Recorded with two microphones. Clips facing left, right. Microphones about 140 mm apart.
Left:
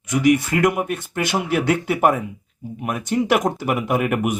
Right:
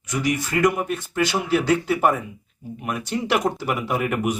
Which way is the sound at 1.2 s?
55° left (ahead or behind).